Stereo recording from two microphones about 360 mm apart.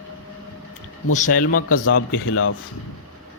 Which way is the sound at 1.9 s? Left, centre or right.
Left.